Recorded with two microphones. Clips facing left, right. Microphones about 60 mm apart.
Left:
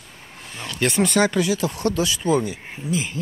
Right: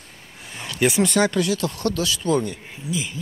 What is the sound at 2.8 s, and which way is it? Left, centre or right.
Speech, left.